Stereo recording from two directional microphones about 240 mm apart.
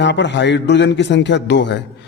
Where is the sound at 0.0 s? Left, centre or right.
Left.